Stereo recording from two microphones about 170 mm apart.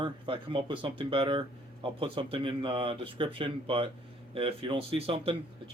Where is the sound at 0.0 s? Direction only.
30° right (ahead or behind).